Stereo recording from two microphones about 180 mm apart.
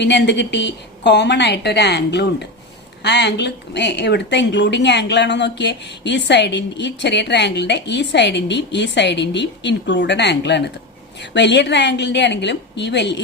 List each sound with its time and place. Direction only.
0.0 s a woman's voice: 75° left (ahead or behind)